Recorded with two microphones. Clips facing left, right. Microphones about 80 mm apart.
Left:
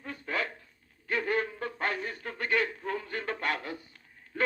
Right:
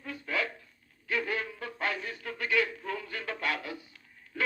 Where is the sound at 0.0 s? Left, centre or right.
Left.